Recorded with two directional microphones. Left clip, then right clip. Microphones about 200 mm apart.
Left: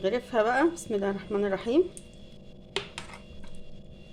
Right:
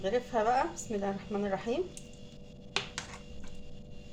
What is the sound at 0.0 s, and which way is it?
A woman's voice, 45° left (ahead or behind).